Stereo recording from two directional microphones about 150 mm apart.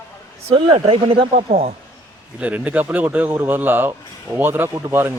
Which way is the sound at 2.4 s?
10° right (ahead or behind).